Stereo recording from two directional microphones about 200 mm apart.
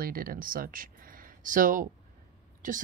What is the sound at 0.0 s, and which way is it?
Speech, 45° right (ahead or behind).